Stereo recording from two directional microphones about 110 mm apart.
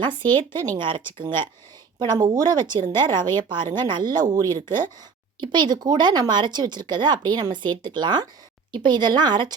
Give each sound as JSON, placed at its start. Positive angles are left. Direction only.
{"t": 0.1, "sound": "speech", "side_deg": 20}
{"t": 0.8, "sound": "speech", "side_deg": -45}